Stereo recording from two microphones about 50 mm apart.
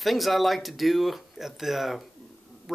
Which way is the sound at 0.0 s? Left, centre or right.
Centre.